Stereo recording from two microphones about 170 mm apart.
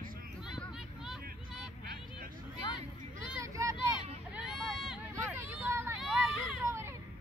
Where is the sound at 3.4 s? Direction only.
20° right (ahead or behind).